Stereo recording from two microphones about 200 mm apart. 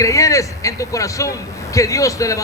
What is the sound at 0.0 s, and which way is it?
A man's voice, 15° left (ahead or behind).